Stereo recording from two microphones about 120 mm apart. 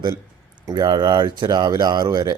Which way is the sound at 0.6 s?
35° right (ahead or behind).